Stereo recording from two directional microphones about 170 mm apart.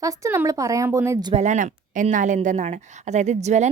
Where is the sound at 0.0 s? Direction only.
20° right (ahead or behind).